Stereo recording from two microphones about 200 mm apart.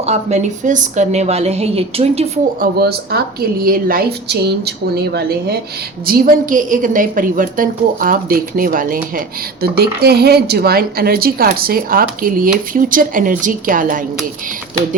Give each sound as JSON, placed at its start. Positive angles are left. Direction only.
{"t": 0.0, "sound": "a woman's voice", "side_deg": -35}
{"t": 2.6, "sound": "speech", "side_deg": -50}
{"t": 6.1, "sound": "speech", "side_deg": -45}